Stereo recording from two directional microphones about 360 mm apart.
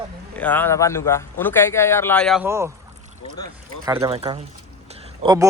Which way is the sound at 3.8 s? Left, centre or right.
Centre.